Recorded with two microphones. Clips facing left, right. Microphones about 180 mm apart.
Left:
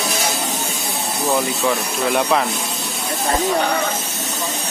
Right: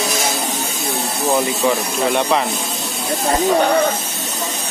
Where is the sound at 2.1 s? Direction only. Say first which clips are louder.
Even; centre (ahead or behind).